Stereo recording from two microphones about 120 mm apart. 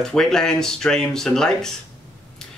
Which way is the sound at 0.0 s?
5° left (ahead or behind).